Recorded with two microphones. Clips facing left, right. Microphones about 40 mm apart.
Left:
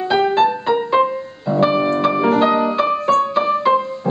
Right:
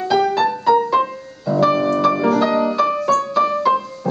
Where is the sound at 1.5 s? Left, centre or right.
Left.